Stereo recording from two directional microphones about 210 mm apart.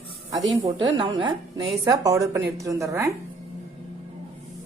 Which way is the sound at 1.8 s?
15° right (ahead or behind).